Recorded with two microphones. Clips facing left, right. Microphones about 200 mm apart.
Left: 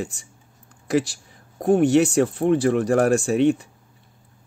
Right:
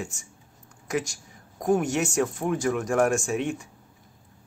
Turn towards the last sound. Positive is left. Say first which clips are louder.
# left 8 dB
turn(degrees=35)  # may be behind; listen again after turning